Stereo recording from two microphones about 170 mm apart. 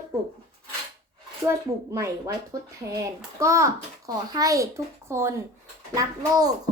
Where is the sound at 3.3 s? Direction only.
15° right (ahead or behind).